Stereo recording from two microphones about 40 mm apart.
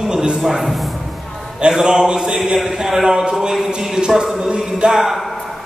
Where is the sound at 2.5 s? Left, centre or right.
Centre.